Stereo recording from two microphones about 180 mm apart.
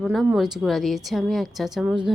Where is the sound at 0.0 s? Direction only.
Centre (ahead or behind).